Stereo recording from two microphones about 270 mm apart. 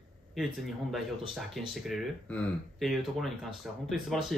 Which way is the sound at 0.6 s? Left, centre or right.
Centre.